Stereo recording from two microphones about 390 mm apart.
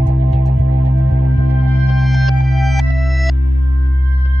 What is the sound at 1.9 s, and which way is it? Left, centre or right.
Music, centre.